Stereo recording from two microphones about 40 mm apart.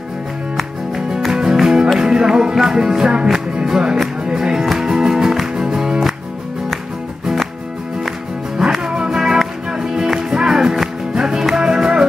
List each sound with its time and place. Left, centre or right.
1.3 s music: centre
8.6 s music: centre